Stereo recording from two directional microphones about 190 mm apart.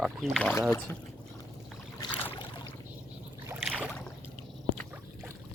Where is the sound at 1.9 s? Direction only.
20° left (ahead or behind).